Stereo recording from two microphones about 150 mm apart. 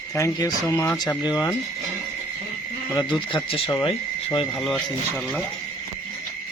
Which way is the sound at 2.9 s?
30° left (ahead or behind).